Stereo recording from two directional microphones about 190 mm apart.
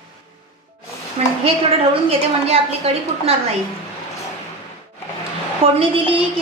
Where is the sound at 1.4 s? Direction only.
30° right (ahead or behind).